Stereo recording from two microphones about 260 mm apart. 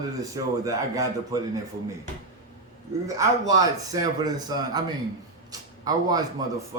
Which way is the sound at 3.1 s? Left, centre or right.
Centre.